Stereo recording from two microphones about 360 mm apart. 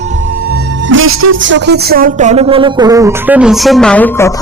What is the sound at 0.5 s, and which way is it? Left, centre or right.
Speech, right.